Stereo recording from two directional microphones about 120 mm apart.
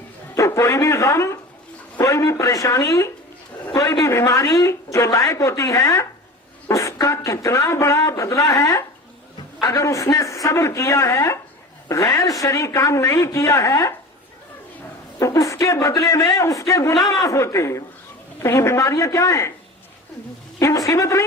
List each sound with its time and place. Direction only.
0.3 s a woman's voice: 25° left (ahead or behind)
15.2 s a woman's voice: 25° left (ahead or behind)
20.6 s a woman's voice: 25° left (ahead or behind)